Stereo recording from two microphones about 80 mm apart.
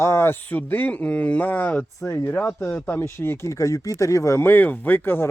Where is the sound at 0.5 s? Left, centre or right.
Left.